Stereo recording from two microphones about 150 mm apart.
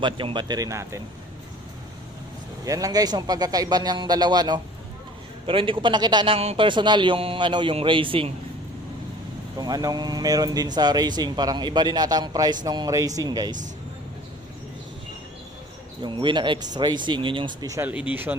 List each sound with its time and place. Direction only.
0.0 s speech: 35° right (ahead or behind)
2.6 s a man's voice: 25° right (ahead or behind)
9.6 s speech: 25° right (ahead or behind)
16.0 s a man's voice: 30° right (ahead or behind)
17.8 s speech: 10° right (ahead or behind)